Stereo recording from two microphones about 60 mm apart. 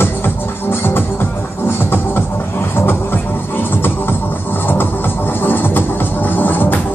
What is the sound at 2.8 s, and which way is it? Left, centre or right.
Music, left.